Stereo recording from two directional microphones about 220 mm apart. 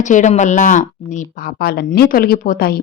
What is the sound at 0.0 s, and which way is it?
Speech, 35° left (ahead or behind).